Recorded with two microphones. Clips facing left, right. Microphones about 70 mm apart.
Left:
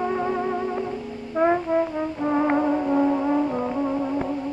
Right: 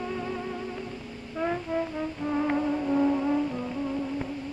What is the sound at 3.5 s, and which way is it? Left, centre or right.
Music, left.